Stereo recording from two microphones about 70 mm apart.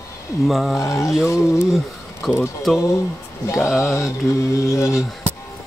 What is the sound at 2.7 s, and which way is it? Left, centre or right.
Mantra, left.